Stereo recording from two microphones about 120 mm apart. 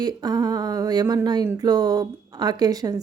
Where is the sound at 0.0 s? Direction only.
35° right (ahead or behind).